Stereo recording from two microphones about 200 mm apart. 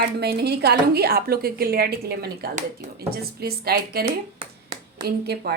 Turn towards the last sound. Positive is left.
turn(degrees=-55)  # may be behind; listen again after turning